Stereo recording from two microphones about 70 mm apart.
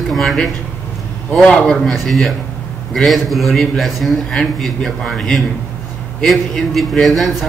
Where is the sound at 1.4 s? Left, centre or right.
Centre.